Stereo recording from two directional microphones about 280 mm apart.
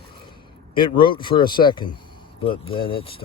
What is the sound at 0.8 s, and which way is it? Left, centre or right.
Speech, centre.